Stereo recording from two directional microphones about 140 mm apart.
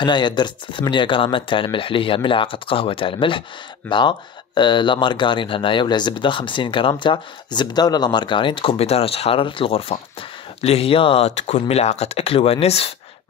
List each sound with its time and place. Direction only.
0.0 s speech: 35° left (ahead or behind)